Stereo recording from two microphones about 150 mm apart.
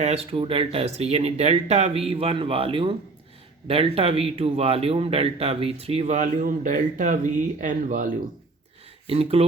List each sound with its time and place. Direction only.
0.0 s speech: 45° right (ahead or behind); by 8.1 s 65° right (ahead or behind)
9.0 s speech: 40° right (ahead or behind)